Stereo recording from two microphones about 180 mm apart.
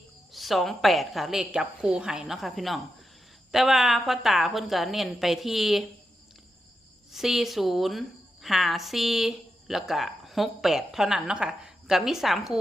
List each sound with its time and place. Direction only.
0.3 s a woman's voice: centre (ahead or behind)
7.1 s a woman's voice: centre (ahead or behind)